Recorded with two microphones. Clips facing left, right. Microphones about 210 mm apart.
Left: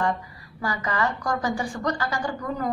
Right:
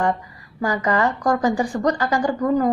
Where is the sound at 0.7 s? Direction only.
45° right (ahead or behind).